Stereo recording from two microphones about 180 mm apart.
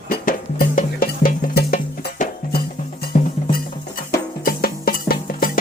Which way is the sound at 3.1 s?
40° left (ahead or behind).